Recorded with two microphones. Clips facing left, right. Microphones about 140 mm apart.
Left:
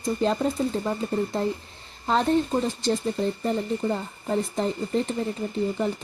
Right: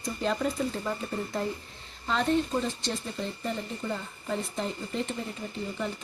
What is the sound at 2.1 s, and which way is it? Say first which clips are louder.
Speech: left 5 dB; 40° left (ahead or behind).